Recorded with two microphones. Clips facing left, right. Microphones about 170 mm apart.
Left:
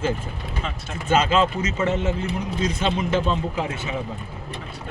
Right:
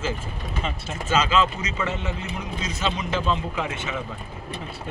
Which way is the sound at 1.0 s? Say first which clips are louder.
Left 2 dB; 55° left (ahead or behind).